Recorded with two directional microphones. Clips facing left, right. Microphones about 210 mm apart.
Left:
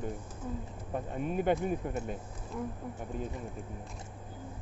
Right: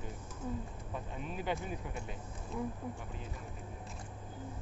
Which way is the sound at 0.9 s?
50° left (ahead or behind).